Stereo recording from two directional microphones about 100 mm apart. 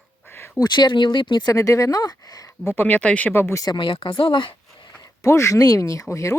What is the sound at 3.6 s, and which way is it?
Speech, 55° left (ahead or behind).